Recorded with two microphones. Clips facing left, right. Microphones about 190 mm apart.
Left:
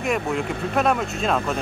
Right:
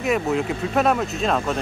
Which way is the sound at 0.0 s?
Centre (ahead or behind).